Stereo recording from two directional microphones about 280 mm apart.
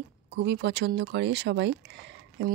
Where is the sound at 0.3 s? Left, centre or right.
Right.